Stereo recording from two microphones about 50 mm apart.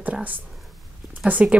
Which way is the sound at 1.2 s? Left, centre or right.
Right.